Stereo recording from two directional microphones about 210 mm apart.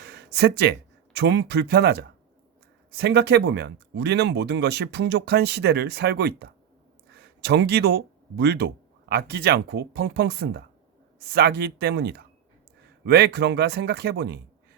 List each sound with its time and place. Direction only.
0.0 s speech: 50° right (ahead or behind)